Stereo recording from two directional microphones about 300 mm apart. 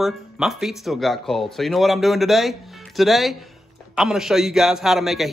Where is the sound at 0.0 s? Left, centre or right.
Centre.